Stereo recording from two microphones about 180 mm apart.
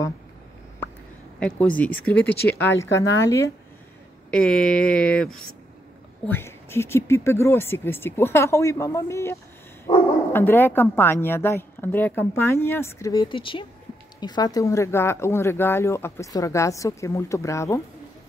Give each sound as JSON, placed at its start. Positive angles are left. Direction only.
{"t": 1.8, "sound": "speech", "side_deg": 10}
{"t": 4.3, "sound": "speech", "side_deg": 5}